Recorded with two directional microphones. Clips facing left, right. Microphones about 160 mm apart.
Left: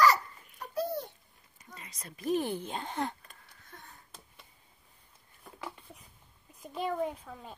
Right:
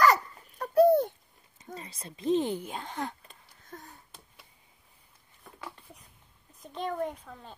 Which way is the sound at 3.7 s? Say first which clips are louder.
Right 7 dB; 45° right (ahead or behind).